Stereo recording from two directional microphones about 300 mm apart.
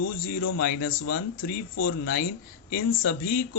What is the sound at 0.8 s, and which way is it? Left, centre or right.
Speech, left.